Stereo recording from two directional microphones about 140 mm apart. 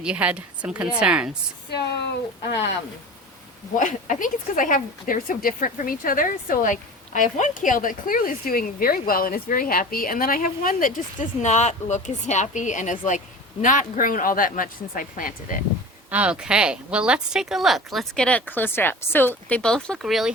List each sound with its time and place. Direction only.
0.0 s a woman's voice: 10° right (ahead or behind)
3.8 s speech: 65° left (ahead or behind)
16.1 s speech: 5° right (ahead or behind)